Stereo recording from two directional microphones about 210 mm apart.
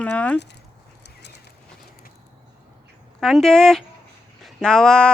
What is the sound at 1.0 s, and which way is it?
Horse, 55° left (ahead or behind).